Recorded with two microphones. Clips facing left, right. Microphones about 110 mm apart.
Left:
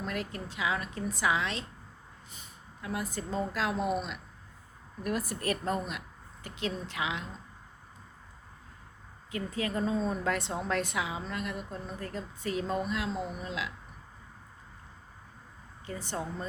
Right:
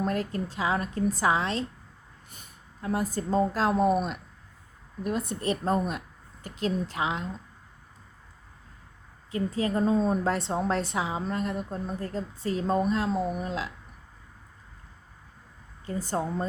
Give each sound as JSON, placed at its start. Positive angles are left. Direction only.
{"t": 0.0, "sound": "a woman's voice", "side_deg": -40}
{"t": 5.0, "sound": "a woman's voice", "side_deg": -25}
{"t": 6.4, "sound": "a woman's voice", "side_deg": -35}
{"t": 9.3, "sound": "a woman's voice", "side_deg": -35}
{"t": 15.9, "sound": "a woman's voice", "side_deg": -40}